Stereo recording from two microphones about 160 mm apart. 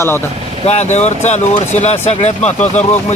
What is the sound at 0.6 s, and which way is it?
Speech, 45° left (ahead or behind).